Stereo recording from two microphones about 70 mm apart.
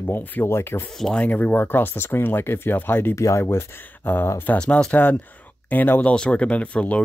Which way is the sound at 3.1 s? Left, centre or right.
Left.